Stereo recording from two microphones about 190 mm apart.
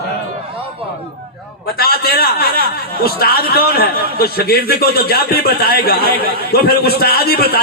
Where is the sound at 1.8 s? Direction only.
55° left (ahead or behind).